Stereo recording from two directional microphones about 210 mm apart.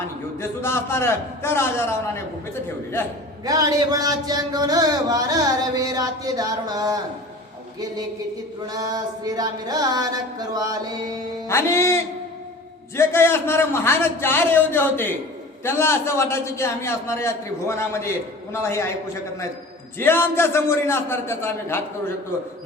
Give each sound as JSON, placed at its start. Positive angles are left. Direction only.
{"t": 0.3, "sound": "a man's voice", "side_deg": 10}
{"t": 3.0, "sound": "a man's voice", "side_deg": 10}
{"t": 3.4, "sound": "speech", "side_deg": -15}
{"t": 8.6, "sound": "a sound", "side_deg": -20}
{"t": 11.4, "sound": "a man's voice", "side_deg": 15}
{"t": 20.0, "sound": "a man's voice", "side_deg": 10}